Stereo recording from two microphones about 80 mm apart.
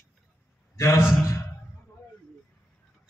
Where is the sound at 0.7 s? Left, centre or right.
Left.